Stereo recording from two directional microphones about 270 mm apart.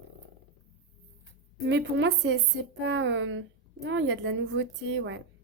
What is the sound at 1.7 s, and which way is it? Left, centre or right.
Speech, right.